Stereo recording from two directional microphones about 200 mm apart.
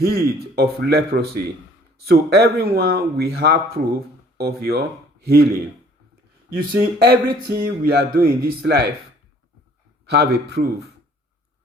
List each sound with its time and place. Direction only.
0.0 s speech: 50° right (ahead or behind)
6.6 s speech: 50° right (ahead or behind)
10.1 s speech: 55° right (ahead or behind)